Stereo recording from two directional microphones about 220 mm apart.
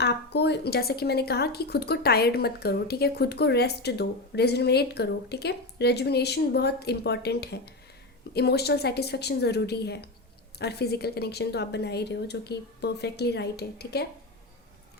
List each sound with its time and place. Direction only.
0.0 s speech: 50° left (ahead or behind)